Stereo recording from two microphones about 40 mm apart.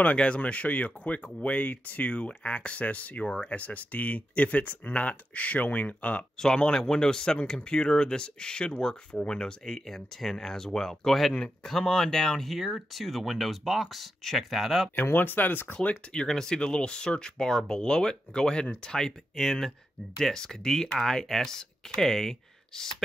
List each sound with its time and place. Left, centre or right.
0.4 s speech: left
6.3 s speech: centre
12.4 s speech: centre
15.1 s speech: left
15.7 s speech: left
16.3 s speech: centre